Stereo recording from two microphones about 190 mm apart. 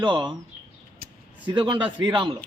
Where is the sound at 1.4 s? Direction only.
25° right (ahead or behind).